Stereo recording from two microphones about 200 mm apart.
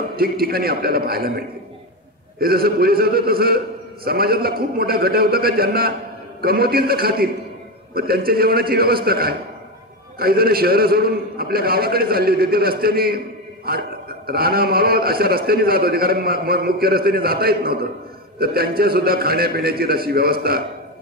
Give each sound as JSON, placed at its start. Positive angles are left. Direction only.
{"t": 0.1, "sound": "a man's voice", "side_deg": -50}
{"t": 2.4, "sound": "a man's voice", "side_deg": -50}